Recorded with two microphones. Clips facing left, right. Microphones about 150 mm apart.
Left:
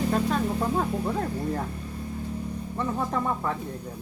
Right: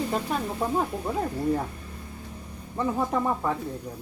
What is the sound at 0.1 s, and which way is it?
Speech, 10° right (ahead or behind).